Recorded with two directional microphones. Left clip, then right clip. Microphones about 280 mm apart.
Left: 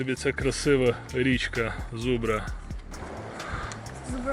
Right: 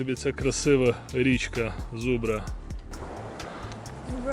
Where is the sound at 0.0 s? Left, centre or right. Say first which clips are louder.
Left 1 dB; centre.